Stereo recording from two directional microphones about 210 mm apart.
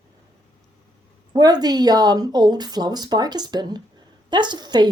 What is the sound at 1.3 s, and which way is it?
A woman's voice, 20° right (ahead or behind).